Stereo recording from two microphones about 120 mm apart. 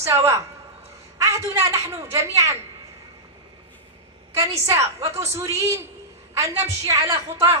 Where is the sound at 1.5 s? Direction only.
20° right (ahead or behind).